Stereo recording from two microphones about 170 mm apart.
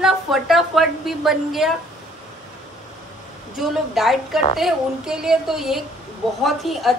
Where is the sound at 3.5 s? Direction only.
Centre (ahead or behind).